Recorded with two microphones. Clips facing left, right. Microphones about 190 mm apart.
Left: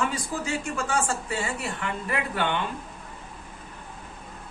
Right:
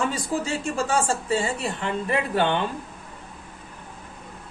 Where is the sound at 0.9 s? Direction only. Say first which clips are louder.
Right 5 dB; 30° right (ahead or behind).